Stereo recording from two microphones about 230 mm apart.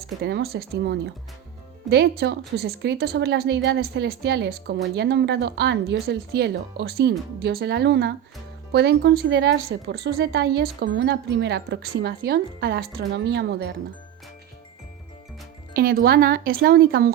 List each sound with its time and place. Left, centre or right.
0.2 s speech: right
15.7 s speech: right